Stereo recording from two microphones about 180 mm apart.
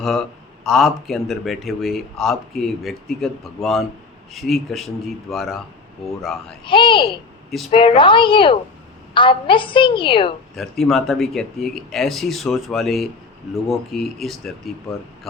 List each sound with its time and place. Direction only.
0.0 s speech: centre (ahead or behind)
6.7 s a woman's voice: 30° left (ahead or behind)
10.5 s speech: centre (ahead or behind)